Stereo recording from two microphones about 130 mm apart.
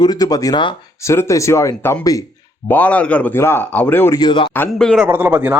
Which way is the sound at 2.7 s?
10° left (ahead or behind).